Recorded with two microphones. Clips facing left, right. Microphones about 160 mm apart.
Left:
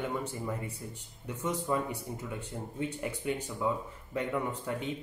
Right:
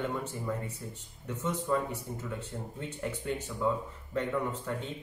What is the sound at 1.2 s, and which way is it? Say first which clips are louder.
Speech: even; 10° left (ahead or behind).